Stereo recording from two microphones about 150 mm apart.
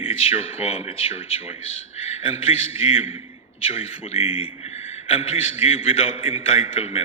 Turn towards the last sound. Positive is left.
turn(degrees=40)  # may be behind; listen again after turning